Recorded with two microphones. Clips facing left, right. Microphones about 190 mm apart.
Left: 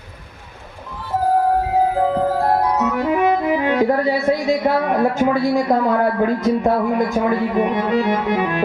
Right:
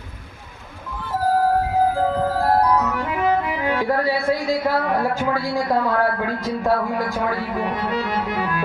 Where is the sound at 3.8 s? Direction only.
20° left (ahead or behind).